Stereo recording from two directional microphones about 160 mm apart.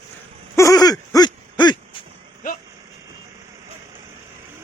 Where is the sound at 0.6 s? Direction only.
20° left (ahead or behind).